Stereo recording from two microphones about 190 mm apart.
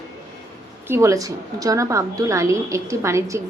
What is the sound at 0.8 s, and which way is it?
A woman's voice, 15° right (ahead or behind).